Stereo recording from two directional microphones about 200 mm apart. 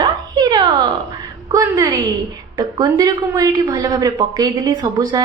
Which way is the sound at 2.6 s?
20° right (ahead or behind).